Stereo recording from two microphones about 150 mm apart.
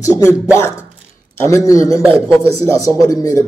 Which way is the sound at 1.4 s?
20° left (ahead or behind).